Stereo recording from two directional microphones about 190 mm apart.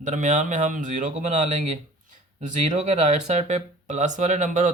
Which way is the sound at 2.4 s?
40° right (ahead or behind).